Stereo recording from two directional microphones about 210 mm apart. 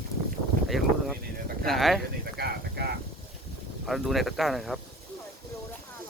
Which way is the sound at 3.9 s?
Centre (ahead or behind).